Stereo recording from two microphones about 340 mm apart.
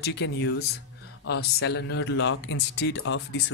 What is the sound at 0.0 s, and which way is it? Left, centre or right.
Speech, left.